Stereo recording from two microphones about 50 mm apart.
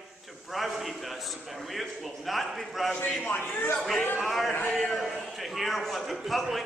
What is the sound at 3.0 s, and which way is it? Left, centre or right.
Speech, left.